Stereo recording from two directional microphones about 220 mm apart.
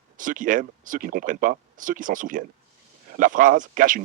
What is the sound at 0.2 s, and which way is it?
Speech, 35° right (ahead or behind).